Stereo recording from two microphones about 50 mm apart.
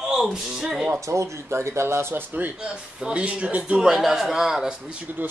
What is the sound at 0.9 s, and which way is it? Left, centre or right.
Speech, right.